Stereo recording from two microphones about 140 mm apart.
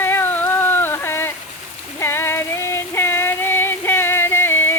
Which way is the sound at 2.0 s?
15° left (ahead or behind).